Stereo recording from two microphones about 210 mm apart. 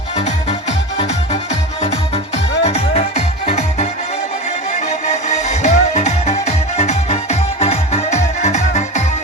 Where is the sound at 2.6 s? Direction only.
30° left (ahead or behind).